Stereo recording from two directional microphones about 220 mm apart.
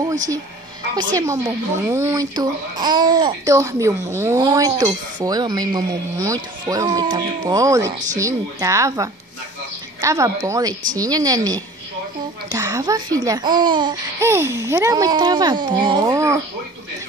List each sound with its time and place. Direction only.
1.1 s a child's voice: 15° right (ahead or behind)